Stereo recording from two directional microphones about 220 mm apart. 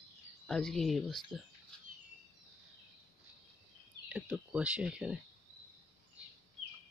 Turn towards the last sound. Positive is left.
turn(degrees=-5)  # may be behind; listen again after turning